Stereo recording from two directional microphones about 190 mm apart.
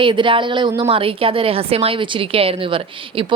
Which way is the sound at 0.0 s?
25° right (ahead or behind).